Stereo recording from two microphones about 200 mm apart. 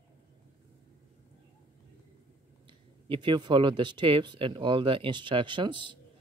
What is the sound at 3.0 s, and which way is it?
Speech, 25° right (ahead or behind).